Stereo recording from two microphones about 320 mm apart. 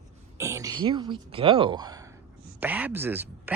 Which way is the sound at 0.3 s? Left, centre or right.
Centre.